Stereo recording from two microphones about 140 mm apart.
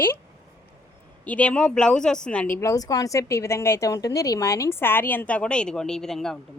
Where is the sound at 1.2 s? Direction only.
10° left (ahead or behind).